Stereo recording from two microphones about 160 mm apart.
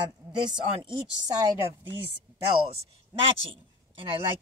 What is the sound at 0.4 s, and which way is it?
Speech, 30° right (ahead or behind).